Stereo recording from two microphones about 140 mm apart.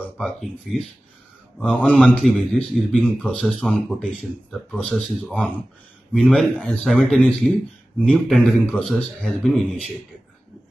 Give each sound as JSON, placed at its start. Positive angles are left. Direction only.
{"t": 0.2, "sound": "a man's voice", "side_deg": 0}